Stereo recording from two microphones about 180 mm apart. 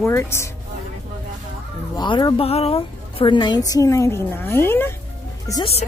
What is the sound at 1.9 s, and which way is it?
A woman's voice, 25° left (ahead or behind).